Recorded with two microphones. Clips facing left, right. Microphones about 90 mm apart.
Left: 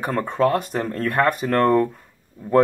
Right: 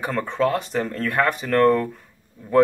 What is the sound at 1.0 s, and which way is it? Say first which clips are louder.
Speech: left 3 dB; 25° left (ahead or behind).